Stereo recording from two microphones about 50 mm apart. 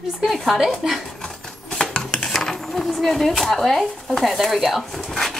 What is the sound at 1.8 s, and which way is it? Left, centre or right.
Dishes, centre.